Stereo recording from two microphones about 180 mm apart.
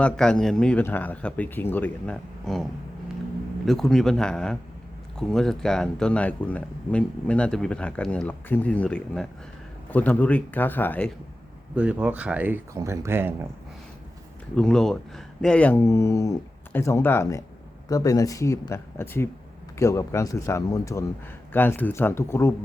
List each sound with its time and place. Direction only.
0.0 s speech: 5° left (ahead or behind)
3.7 s speech: centre (ahead or behind)
11.7 s speech: 5° right (ahead or behind)
14.5 s speech: 5° left (ahead or behind)